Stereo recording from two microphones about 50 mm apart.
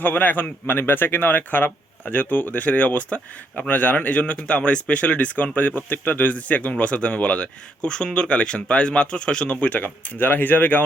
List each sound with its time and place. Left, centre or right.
0.0 s speech: left